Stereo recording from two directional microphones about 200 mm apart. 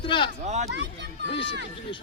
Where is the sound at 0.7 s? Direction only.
60° right (ahead or behind).